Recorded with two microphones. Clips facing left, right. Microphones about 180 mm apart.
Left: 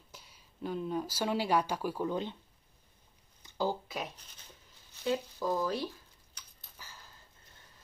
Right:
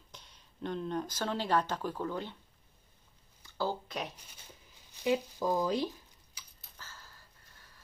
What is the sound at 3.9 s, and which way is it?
Speech, 5° left (ahead or behind).